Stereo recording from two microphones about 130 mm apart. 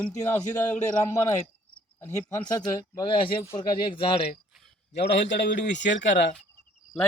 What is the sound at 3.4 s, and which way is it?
Speech, 25° left (ahead or behind).